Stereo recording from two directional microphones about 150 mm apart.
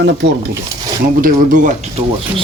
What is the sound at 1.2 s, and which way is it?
Speech, 60° right (ahead or behind).